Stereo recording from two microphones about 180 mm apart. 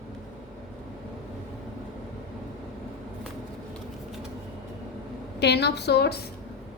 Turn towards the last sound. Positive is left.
turn(degrees=65)  # may be behind; listen again after turning